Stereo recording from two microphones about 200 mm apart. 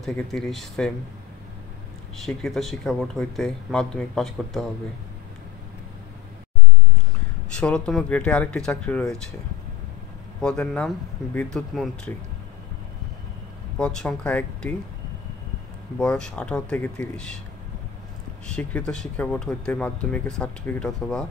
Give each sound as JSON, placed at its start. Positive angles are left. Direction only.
{"t": 0.0, "sound": "speech", "side_deg": 0}
{"t": 2.2, "sound": "speech", "side_deg": 0}
{"t": 7.4, "sound": "speech", "side_deg": 5}
{"t": 10.4, "sound": "speech", "side_deg": 5}
{"t": 13.7, "sound": "speech", "side_deg": 5}
{"t": 16.0, "sound": "speech", "side_deg": 5}
{"t": 18.5, "sound": "speech", "side_deg": 5}